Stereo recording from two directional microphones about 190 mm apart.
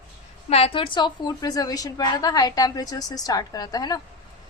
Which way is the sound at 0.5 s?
30° left (ahead or behind).